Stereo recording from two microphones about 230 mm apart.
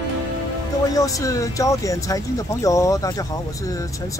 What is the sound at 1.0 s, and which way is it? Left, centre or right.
Speech, centre.